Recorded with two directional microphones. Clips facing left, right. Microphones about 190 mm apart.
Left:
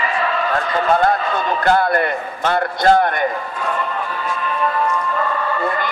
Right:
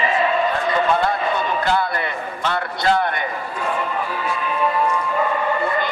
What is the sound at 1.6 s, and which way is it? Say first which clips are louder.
A man's voice: left 5 dB; 50° left (ahead or behind).